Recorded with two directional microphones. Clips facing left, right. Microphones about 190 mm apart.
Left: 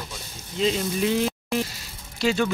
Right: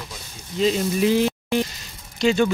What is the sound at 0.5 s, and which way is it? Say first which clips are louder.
Speech: right 3 dB; centre (ahead or behind).